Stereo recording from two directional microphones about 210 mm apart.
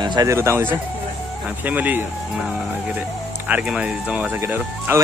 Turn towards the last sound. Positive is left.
turn(degrees=-10)  # may be behind; listen again after turning